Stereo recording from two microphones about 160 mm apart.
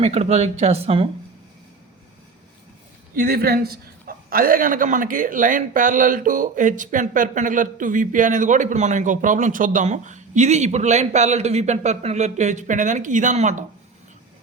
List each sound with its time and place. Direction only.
0.0 s speech: 40° right (ahead or behind)
3.2 s a man's voice: 70° right (ahead or behind); by 13.7 s 45° right (ahead or behind)